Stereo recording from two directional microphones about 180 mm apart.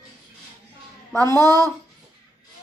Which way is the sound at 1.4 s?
20° right (ahead or behind).